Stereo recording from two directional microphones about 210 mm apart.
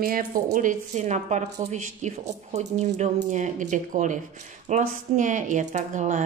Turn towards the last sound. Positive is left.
turn(degrees=-35)  # may be behind; listen again after turning